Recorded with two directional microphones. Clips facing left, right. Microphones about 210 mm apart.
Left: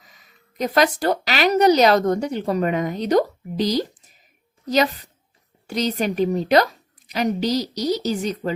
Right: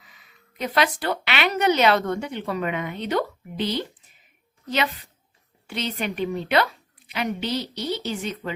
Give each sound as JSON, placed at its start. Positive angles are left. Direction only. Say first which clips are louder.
{"t": 0.0, "sound": "a woman's voice", "louder": "left 2 dB", "side_deg": 40}